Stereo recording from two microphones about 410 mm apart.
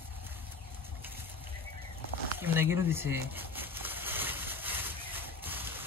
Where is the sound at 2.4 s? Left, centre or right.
Centre.